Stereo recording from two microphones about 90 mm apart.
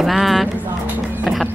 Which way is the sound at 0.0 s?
Centre (ahead or behind).